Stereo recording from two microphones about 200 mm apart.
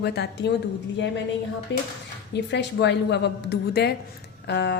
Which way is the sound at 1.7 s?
60° left (ahead or behind).